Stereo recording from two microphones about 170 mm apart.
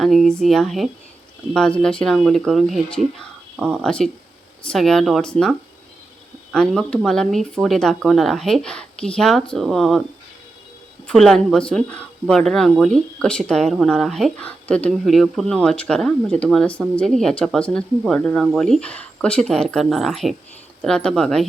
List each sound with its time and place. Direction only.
0.0 s speech: centre (ahead or behind)
11.0 s speech: centre (ahead or behind)